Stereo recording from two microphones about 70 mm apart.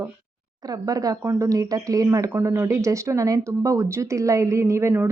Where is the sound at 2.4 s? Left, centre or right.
Right.